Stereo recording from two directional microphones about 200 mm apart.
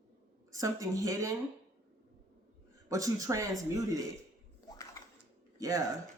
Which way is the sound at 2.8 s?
15° right (ahead or behind).